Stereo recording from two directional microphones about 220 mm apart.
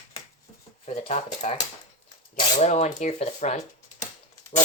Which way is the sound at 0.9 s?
30° left (ahead or behind).